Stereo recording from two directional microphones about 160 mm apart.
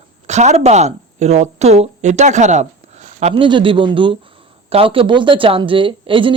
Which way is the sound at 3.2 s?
35° right (ahead or behind).